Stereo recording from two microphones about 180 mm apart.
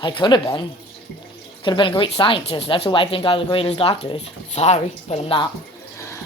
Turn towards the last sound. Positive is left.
turn(degrees=30)  # may be behind; listen again after turning